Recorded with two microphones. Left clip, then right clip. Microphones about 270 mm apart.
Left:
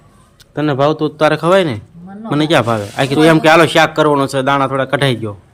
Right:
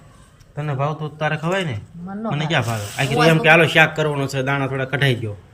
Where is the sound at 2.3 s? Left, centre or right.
Centre.